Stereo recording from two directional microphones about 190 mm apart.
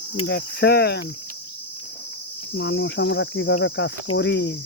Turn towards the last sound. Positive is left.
turn(degrees=60)  # may be behind; listen again after turning